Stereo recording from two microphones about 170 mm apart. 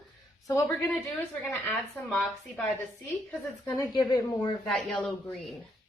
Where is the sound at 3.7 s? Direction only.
25° left (ahead or behind).